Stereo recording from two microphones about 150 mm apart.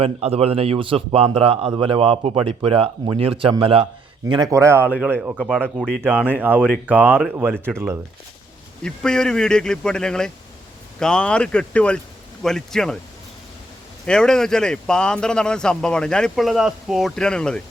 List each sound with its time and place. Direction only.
0.0 s a man's voice: 40° right (ahead or behind)
4.5 s speech: 15° right (ahead or behind)
8.8 s speech: 5° left (ahead or behind)
14.1 s speech: 5° left (ahead or behind)